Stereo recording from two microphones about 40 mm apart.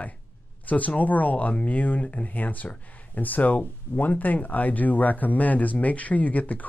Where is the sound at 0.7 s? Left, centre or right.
Left.